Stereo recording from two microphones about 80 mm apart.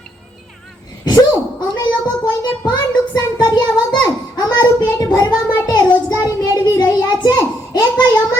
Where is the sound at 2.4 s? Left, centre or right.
Left.